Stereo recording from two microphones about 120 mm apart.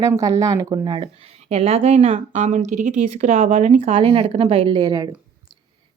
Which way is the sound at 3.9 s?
50° right (ahead or behind).